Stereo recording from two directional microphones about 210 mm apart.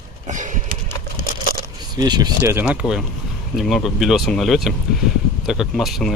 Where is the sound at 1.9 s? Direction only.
20° right (ahead or behind).